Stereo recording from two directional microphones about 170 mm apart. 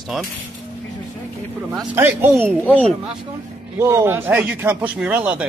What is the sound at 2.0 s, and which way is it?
Speech, 10° right (ahead or behind).